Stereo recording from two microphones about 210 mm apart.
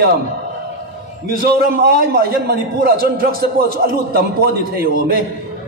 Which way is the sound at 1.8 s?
45° right (ahead or behind).